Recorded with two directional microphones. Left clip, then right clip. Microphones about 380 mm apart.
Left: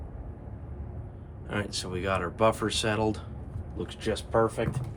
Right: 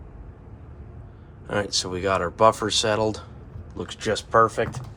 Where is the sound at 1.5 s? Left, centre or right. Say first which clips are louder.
Right 8 dB; centre.